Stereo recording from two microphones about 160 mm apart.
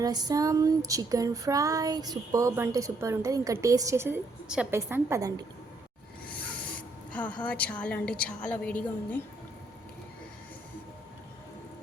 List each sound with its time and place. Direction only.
0.0 s female singing: 25° right (ahead or behind)
7.1 s a woman's voice: 10° left (ahead or behind)